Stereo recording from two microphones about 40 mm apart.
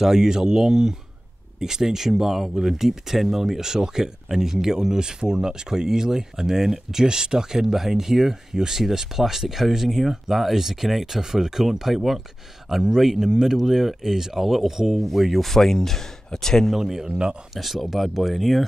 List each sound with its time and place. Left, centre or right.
0.0 s speech: centre
15.5 s speech: centre
16.7 s speech: centre
17.1 s speech: right
17.6 s speech: centre